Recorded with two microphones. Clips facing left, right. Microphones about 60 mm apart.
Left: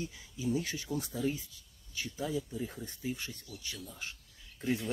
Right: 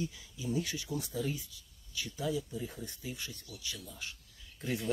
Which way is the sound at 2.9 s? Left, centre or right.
Left.